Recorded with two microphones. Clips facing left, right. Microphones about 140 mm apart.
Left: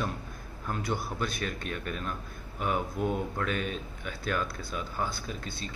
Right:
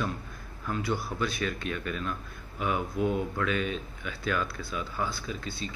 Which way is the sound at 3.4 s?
45° left (ahead or behind).